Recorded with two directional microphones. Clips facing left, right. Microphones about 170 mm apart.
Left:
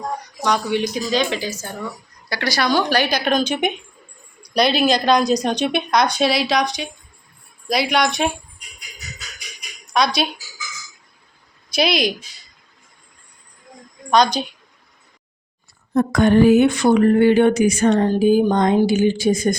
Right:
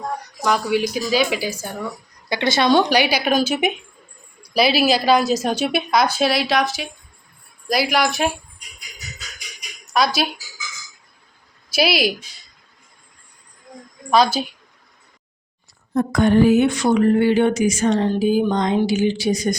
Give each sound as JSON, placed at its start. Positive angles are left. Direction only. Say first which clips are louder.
{"t": 0.4, "sound": "speech", "louder": "right 1 dB", "side_deg": -5}
{"t": 2.3, "sound": "a woman's voice", "louder": "right 3 dB", "side_deg": -25}
{"t": 2.9, "sound": "a woman's voice", "louder": "right 1 dB", "side_deg": -10}
{"t": 9.9, "sound": "a woman's voice", "louder": "even", "side_deg": -5}
{"t": 11.7, "sound": "a woman's voice", "louder": "even", "side_deg": -5}
{"t": 14.1, "sound": "a woman's voice", "louder": "even", "side_deg": -5}
{"t": 16.0, "sound": "speech", "louder": "left 1 dB", "side_deg": 70}